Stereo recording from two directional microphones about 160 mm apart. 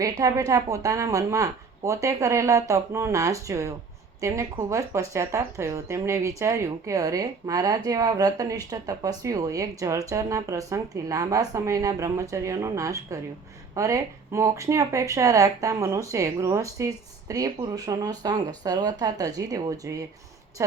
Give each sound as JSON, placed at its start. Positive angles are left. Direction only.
{"t": 0.0, "sound": "a woman's voice", "side_deg": -20}